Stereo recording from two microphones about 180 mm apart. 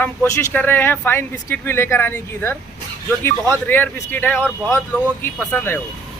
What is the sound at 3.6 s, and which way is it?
Speech, 10° left (ahead or behind).